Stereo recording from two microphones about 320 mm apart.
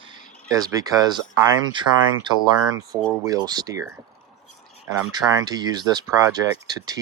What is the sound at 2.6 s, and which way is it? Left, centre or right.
Speech, centre.